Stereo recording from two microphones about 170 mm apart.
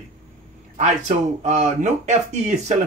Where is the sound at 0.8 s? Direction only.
45° right (ahead or behind).